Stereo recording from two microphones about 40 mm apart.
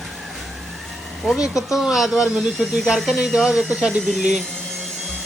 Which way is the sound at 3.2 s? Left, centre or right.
Centre.